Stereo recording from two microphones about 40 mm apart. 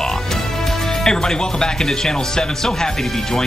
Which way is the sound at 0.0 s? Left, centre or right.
Centre.